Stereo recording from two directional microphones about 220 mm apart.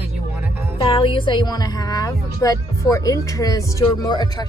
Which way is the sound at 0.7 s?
25° left (ahead or behind).